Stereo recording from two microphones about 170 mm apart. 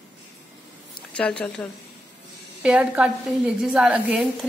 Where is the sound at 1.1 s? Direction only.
5° left (ahead or behind).